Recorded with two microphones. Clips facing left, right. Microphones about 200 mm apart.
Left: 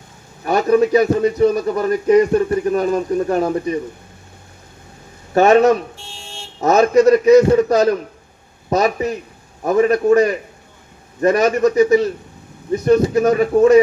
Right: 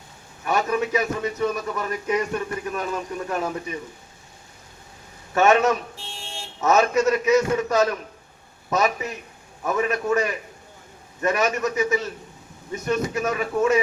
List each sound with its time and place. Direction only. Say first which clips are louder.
0.4 s a man's voice: left 9 dB; 35° left (ahead or behind)
5.3 s a man's voice: left 7 dB; 35° left (ahead or behind)
6.0 s car alarm: left 1 dB; centre (ahead or behind)
6.6 s a man's voice: left 7 dB; 35° left (ahead or behind)